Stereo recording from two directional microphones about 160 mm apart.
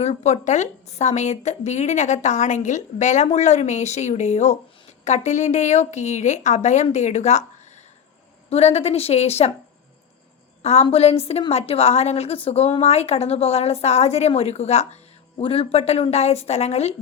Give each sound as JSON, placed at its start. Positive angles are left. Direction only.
{"t": 0.0, "sound": "speech", "side_deg": 45}
{"t": 8.4, "sound": "speech", "side_deg": 40}
{"t": 10.6, "sound": "a woman's voice", "side_deg": 40}